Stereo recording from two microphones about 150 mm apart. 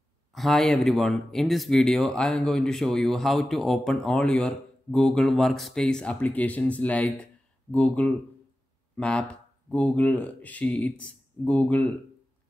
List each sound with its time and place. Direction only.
0.3 s speech: centre (ahead or behind)